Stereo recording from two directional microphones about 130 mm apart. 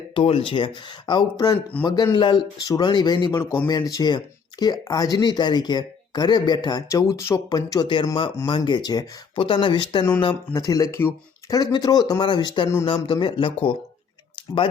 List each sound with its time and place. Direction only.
0.1 s speech: 45° left (ahead or behind)
1.7 s speech: 10° left (ahead or behind)
2.1 s speech: 35° left (ahead or behind)
10.5 s speech: 25° left (ahead or behind)